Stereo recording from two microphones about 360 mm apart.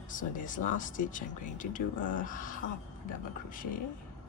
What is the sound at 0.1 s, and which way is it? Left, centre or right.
Speech, left.